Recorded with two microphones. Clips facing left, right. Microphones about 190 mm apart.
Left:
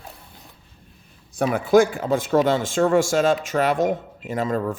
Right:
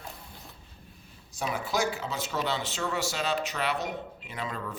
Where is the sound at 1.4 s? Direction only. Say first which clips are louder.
Left 13 dB; 55° left (ahead or behind).